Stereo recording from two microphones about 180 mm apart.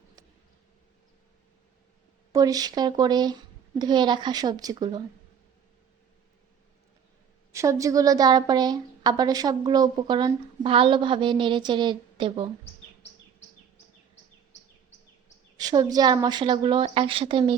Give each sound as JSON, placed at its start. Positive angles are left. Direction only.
{"t": 2.3, "sound": "a woman's voice", "side_deg": -20}
{"t": 7.5, "sound": "a woman's voice", "side_deg": -15}
{"t": 15.5, "sound": "a woman's voice", "side_deg": -20}